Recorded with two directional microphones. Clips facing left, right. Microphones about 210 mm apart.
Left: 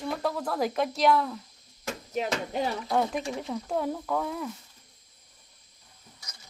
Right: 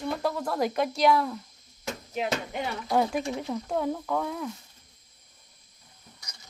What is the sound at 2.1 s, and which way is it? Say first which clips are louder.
Speech: left 1 dB; 40° left (ahead or behind).